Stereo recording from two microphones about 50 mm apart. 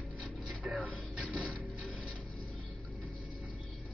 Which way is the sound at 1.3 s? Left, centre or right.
Left.